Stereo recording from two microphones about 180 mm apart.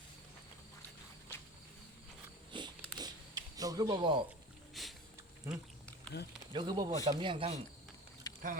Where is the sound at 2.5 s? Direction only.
25° right (ahead or behind).